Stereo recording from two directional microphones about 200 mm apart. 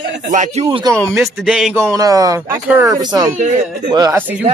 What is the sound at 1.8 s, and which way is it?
Speech, 15° right (ahead or behind).